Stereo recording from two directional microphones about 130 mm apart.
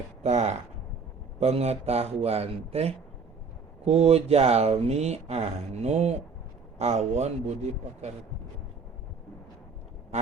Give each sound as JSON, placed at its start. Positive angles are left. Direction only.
{"t": 0.2, "sound": "speech", "side_deg": -60}